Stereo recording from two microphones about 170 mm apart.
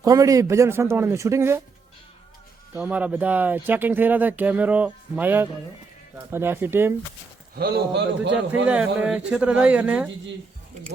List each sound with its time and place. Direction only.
0.0 s speech: 20° right (ahead or behind)
2.7 s speech: 10° right (ahead or behind)
7.5 s a man's voice: 65° right (ahead or behind); by 8.4 s 85° right
8.6 s speech: 10° right (ahead or behind)